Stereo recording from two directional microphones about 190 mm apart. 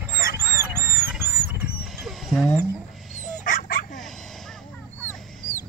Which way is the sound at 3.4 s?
45° left (ahead or behind).